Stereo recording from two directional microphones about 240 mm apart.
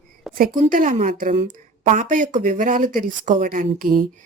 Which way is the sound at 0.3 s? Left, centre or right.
Right.